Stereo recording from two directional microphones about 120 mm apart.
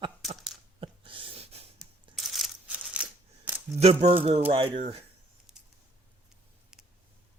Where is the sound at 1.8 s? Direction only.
Centre (ahead or behind).